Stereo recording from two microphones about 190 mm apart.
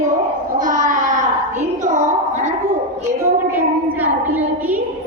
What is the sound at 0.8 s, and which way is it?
Child singing, 40° right (ahead or behind).